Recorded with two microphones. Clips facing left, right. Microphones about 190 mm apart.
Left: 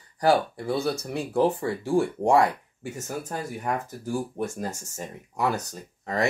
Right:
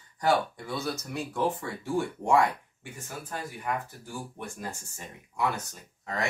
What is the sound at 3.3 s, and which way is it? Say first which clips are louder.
Speech: left 2 dB; 45° left (ahead or behind).